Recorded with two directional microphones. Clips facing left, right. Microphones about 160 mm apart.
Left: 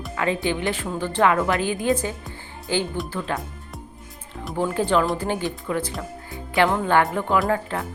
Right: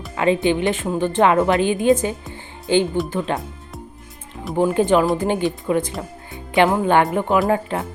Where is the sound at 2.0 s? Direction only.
20° right (ahead or behind).